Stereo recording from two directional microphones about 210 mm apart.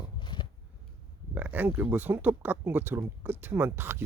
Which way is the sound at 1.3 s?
10° right (ahead or behind).